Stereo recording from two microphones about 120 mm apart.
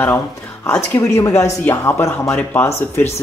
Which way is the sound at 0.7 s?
20° left (ahead or behind).